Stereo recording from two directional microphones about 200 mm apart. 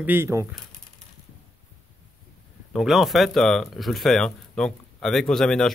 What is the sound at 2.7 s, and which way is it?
Speech, centre (ahead or behind).